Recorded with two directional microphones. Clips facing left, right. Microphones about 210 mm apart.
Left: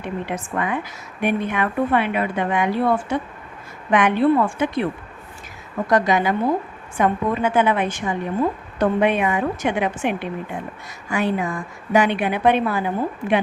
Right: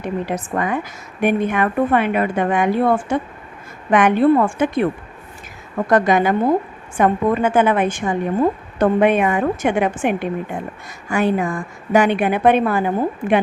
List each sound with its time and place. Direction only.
0.0 s a woman's voice: 40° right (ahead or behind)
5.9 s a woman's voice: 50° right (ahead or behind)